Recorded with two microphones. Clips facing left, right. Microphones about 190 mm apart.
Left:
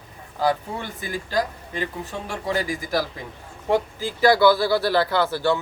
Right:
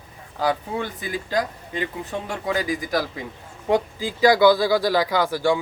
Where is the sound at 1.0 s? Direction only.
15° right (ahead or behind).